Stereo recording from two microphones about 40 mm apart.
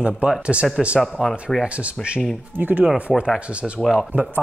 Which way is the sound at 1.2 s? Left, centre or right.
Centre.